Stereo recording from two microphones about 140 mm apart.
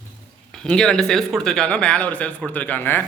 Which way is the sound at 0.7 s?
5° left (ahead or behind).